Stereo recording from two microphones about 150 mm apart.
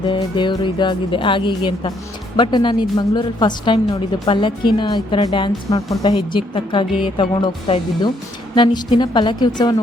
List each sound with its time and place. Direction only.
0.0 s a woman's voice: 30° left (ahead or behind)